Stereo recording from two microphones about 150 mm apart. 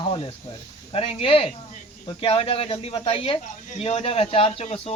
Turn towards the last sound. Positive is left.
turn(degrees=45)  # may be behind; listen again after turning